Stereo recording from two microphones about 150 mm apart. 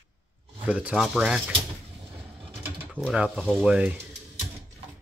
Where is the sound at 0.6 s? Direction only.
10° right (ahead or behind).